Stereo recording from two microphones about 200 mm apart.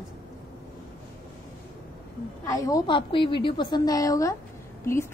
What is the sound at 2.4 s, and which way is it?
A woman's voice, 15° left (ahead or behind).